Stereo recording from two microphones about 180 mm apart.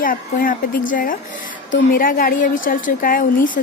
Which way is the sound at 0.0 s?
50° left (ahead or behind).